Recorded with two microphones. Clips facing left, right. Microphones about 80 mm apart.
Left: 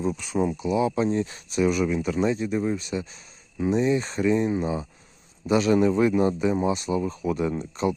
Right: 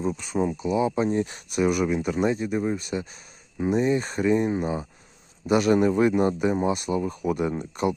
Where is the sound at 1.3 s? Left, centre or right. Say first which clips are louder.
Even; right.